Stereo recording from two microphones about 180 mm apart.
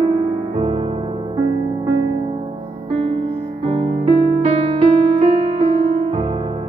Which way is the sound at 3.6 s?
35° right (ahead or behind).